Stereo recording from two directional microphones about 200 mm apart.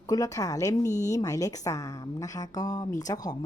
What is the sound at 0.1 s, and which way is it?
Speech, 20° left (ahead or behind).